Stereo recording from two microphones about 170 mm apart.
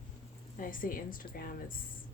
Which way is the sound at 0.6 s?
55° left (ahead or behind).